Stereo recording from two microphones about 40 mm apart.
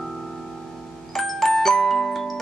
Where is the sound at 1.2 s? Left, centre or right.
Centre.